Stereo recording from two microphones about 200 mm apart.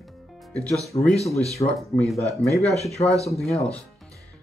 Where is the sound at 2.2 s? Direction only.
Centre (ahead or behind).